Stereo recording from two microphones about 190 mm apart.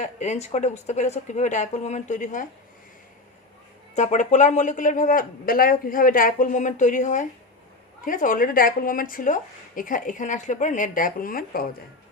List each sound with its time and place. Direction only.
0.0 s speech: 40° left (ahead or behind)
3.9 s speech: 40° left (ahead or behind)